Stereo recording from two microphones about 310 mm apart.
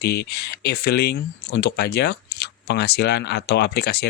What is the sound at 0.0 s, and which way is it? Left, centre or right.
Speech, left.